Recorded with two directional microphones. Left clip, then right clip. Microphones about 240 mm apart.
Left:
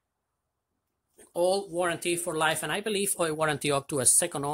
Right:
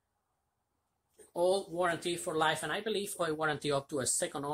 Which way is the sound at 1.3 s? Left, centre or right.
Left.